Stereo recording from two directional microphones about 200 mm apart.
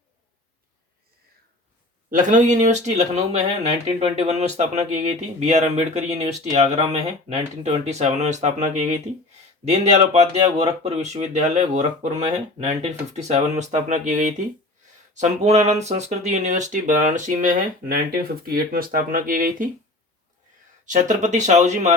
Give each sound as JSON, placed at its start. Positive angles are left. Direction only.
{"t": 2.0, "sound": "speech", "side_deg": -40}
{"t": 20.9, "sound": "speech", "side_deg": -40}